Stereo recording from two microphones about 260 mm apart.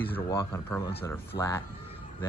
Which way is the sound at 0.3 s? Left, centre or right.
Centre.